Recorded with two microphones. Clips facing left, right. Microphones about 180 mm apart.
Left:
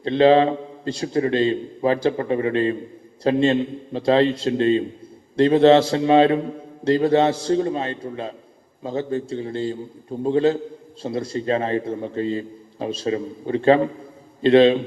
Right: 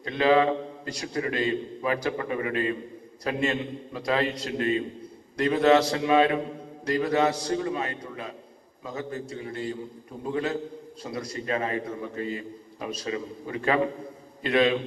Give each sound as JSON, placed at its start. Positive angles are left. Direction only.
{"t": 0.0, "sound": "a man's voice", "side_deg": 30}